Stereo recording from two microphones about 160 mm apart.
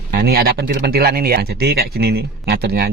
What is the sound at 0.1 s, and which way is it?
Speech, 85° right.